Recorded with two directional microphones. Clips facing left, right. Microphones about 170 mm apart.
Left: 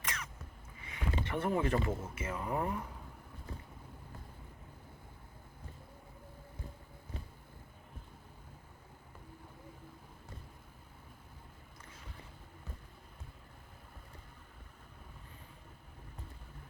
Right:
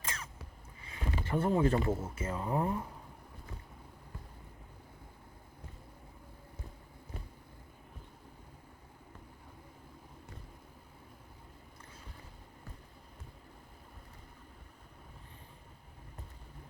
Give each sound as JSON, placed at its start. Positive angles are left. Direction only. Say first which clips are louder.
{"t": 0.0, "sound": "a sound", "louder": "even", "side_deg": -30}
{"t": 1.9, "sound": "speech", "louder": "right 4 dB", "side_deg": -10}
{"t": 2.1, "sound": "speech", "louder": "right 3 dB", "side_deg": -30}